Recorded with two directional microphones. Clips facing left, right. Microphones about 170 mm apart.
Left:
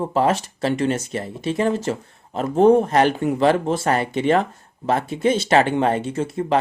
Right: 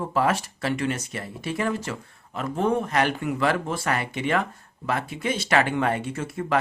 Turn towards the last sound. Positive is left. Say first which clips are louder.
# left 5 dB
turn(degrees=25)  # may be behind; listen again after turning